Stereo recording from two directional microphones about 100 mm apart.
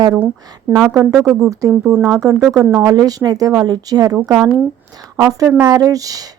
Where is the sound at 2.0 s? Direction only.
40° right (ahead or behind).